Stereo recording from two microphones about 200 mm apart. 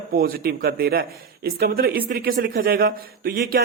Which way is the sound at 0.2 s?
50° right (ahead or behind).